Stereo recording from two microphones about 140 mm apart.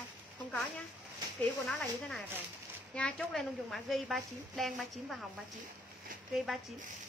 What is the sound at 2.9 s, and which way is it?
A woman's voice, 5° left (ahead or behind).